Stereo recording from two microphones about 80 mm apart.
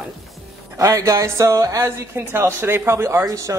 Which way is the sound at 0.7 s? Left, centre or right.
Right.